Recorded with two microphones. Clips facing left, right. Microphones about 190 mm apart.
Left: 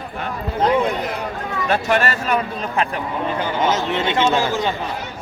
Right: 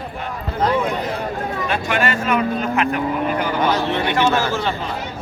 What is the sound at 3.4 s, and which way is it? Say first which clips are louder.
Speech: left 2 dB; 20° left (ahead or behind).